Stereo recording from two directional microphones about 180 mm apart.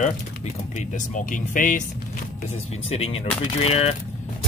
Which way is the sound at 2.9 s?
35° left (ahead or behind).